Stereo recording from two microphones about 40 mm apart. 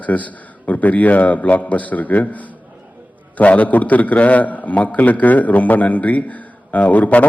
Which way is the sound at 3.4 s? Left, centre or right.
Left.